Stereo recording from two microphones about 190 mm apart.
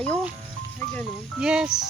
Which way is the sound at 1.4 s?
5° right (ahead or behind).